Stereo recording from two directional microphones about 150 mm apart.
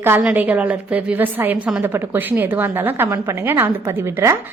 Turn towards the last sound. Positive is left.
turn(degrees=-15)  # may be behind; listen again after turning